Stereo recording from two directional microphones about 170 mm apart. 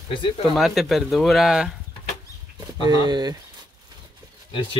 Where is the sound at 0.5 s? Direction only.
Centre (ahead or behind).